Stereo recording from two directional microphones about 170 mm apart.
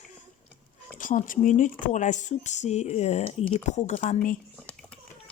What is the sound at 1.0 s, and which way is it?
Speech, 50° left (ahead or behind).